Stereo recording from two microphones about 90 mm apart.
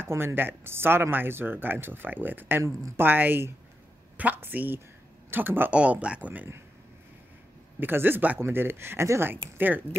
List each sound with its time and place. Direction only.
0.0 s speech: 25° right (ahead or behind)
7.8 s speech: 20° right (ahead or behind)